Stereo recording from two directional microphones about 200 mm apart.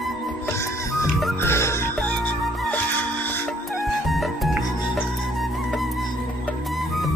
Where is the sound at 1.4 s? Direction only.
15° left (ahead or behind).